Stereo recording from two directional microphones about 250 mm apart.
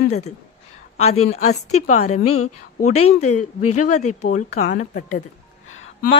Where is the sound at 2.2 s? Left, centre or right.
Left.